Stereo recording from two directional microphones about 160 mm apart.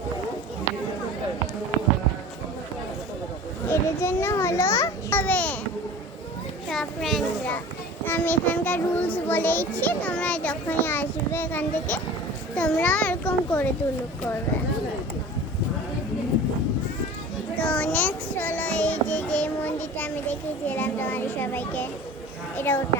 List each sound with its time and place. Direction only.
3.7 s a child's voice: 15° left (ahead or behind)
6.7 s a child's voice: centre (ahead or behind)
17.6 s child singing: 10° left (ahead or behind)
20.7 s a child's voice: 10° left (ahead or behind)